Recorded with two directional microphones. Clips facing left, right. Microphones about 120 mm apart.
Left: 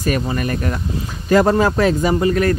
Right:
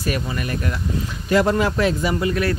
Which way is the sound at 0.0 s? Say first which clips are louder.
Left 5 dB; 45° left (ahead or behind).